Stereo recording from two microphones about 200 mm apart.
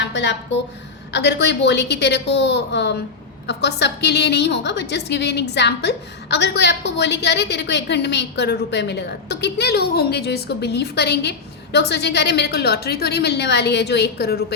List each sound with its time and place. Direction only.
0.0 s a woman's voice: 60° left (ahead or behind)